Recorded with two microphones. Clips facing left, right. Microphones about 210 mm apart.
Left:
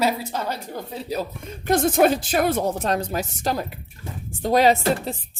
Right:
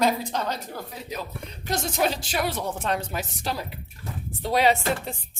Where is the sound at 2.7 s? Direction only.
40° left (ahead or behind).